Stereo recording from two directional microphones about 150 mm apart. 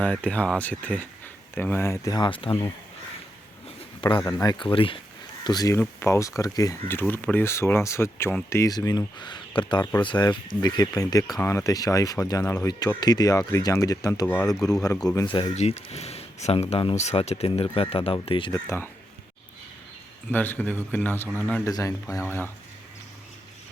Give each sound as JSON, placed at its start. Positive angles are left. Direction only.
{"t": 0.0, "sound": "speech", "side_deg": 10}
{"t": 4.0, "sound": "speech", "side_deg": 30}
{"t": 4.6, "sound": "speech", "side_deg": 35}
{"t": 15.5, "sound": "speech", "side_deg": 45}
{"t": 18.5, "sound": "speech", "side_deg": 15}
{"t": 20.3, "sound": "speech", "side_deg": 10}
{"t": 21.7, "sound": "speech", "side_deg": 25}